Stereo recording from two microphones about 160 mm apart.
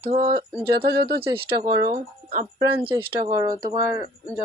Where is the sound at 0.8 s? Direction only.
85° right.